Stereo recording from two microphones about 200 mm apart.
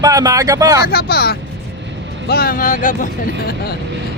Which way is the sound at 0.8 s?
50° left (ahead or behind).